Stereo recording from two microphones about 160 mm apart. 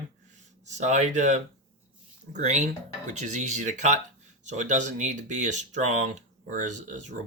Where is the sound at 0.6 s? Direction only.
45° right (ahead or behind).